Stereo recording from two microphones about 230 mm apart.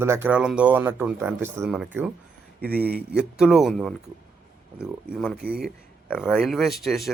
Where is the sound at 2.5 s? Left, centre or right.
Right.